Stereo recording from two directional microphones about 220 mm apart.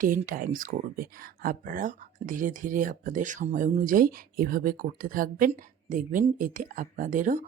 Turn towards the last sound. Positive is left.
turn(degrees=-35)  # may be behind; listen again after turning